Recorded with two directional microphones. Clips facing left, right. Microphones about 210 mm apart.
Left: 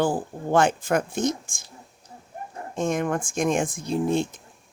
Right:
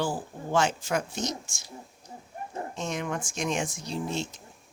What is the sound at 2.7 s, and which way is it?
Speech, 50° left (ahead or behind).